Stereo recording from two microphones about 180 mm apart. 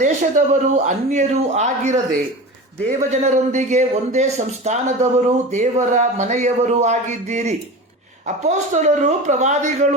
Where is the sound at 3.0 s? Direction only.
40° right (ahead or behind).